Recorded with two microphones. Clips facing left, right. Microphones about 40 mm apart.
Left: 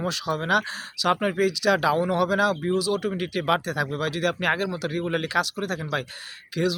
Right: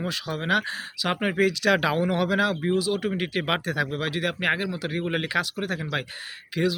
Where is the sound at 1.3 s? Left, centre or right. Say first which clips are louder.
Even; right.